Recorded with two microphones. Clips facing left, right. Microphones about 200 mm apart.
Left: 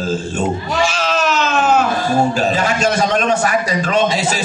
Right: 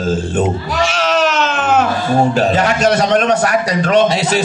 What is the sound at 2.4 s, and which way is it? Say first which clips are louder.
A man's voice: right 3 dB; 60° right (ahead or behind).